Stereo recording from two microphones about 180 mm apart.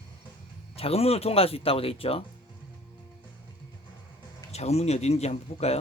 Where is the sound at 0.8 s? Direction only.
35° left (ahead or behind).